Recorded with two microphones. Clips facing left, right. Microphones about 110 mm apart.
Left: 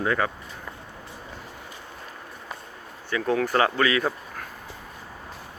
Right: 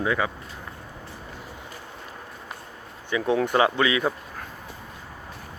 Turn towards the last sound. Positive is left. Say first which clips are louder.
# right 1 dB
turn(degrees=-15)  # may be behind; listen again after turning